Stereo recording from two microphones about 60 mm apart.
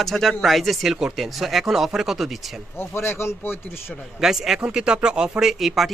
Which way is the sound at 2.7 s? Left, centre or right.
Left.